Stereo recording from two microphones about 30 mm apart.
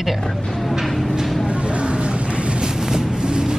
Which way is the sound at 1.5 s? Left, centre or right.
Right.